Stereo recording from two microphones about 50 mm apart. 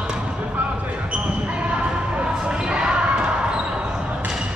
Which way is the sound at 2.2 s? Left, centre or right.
Centre.